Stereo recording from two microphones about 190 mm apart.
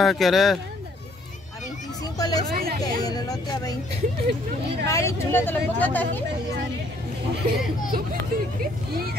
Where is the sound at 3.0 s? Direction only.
20° left (ahead or behind).